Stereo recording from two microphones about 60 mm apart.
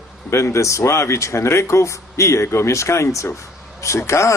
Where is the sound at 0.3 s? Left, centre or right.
Left.